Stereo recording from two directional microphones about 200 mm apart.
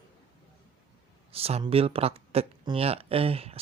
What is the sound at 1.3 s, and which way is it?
Speech, 30° right (ahead or behind).